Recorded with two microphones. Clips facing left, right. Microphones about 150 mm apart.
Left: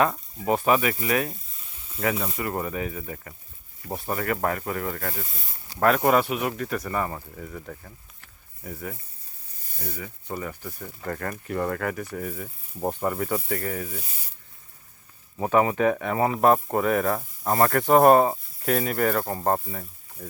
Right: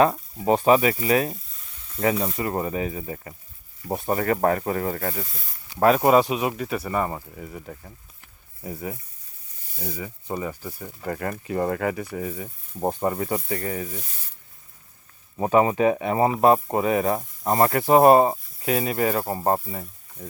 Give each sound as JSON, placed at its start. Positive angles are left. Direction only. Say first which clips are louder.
{"t": 0.4, "sound": "speech", "louder": "right 4 dB", "side_deg": -25}
{"t": 5.7, "sound": "speech", "louder": "right 3 dB", "side_deg": -20}
{"t": 15.4, "sound": "speech", "louder": "right 2 dB", "side_deg": -25}